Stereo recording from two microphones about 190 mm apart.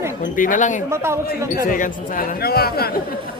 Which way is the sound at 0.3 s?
45° left (ahead or behind).